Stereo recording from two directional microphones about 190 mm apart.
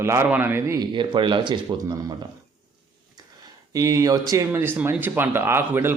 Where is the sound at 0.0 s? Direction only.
15° right (ahead or behind).